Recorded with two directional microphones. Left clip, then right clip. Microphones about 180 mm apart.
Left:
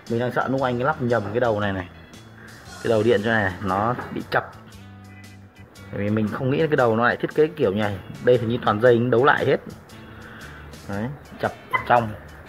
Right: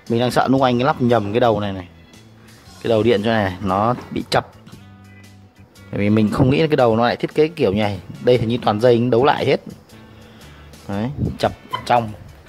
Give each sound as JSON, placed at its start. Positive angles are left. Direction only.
{"t": 0.1, "sound": "speech", "side_deg": -55}
{"t": 1.6, "sound": "speech", "side_deg": -30}
{"t": 2.8, "sound": "speech", "side_deg": -45}
{"t": 5.9, "sound": "speech", "side_deg": -50}
{"t": 6.4, "sound": "speech", "side_deg": -40}
{"t": 10.9, "sound": "speech", "side_deg": -45}